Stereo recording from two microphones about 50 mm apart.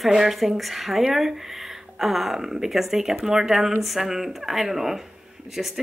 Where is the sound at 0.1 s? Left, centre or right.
Centre.